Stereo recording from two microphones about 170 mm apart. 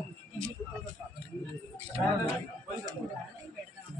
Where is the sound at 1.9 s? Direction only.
35° right (ahead or behind).